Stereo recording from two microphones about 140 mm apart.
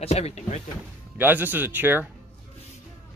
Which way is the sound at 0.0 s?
50° left (ahead or behind).